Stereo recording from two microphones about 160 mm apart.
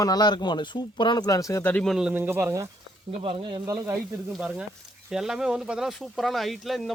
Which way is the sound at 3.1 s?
35° right (ahead or behind).